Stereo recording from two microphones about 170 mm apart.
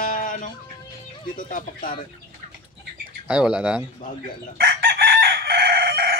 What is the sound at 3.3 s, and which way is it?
Speech, 5° right (ahead or behind).